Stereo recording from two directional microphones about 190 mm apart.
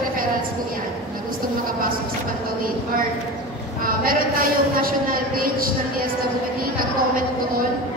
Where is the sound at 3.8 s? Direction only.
50° right (ahead or behind).